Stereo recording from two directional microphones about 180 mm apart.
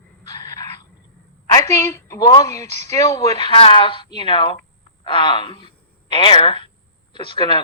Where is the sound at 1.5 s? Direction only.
15° left (ahead or behind).